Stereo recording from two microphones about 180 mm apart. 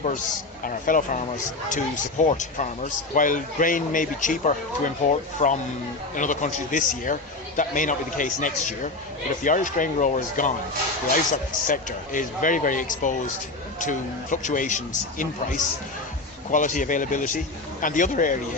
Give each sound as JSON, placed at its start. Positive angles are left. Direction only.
{"t": 0.6, "sound": "speech", "side_deg": 50}